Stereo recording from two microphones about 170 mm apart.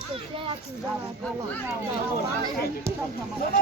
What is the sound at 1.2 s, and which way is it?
Speech, 10° left (ahead or behind).